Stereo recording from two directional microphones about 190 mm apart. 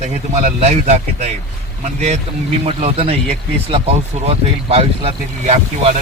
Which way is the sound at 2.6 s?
30° right (ahead or behind).